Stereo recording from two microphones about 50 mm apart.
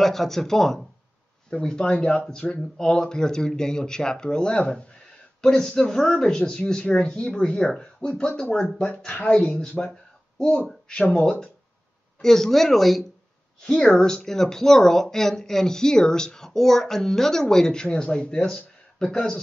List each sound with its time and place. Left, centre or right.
0.0 s speech: centre
1.5 s speech: centre
9.4 s speech: centre
13.6 s a woman's voice: centre